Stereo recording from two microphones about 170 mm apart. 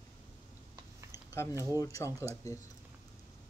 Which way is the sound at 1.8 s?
20° left (ahead or behind).